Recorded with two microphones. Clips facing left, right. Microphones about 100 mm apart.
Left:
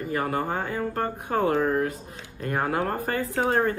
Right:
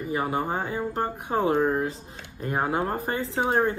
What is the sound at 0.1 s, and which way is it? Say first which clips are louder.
Speech: even; 15° right (ahead or behind).